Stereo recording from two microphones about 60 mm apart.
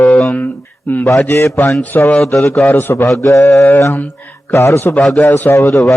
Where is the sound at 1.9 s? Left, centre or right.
Left.